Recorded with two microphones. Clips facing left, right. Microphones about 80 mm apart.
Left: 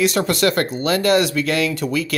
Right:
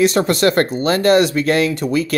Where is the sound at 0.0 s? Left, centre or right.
Right.